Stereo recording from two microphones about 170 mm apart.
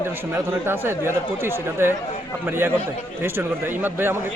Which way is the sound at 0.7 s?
15° right (ahead or behind).